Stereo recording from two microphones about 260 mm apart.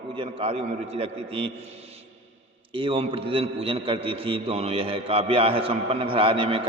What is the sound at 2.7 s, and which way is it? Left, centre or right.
A man's voice, centre.